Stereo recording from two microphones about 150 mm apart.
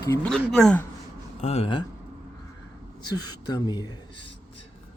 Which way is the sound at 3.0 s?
25° left (ahead or behind).